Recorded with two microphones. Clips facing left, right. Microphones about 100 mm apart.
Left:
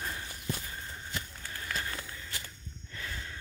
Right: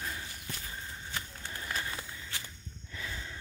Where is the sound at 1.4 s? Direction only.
20° right (ahead or behind).